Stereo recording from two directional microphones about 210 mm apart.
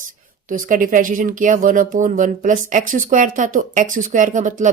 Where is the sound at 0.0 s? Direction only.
40° right (ahead or behind).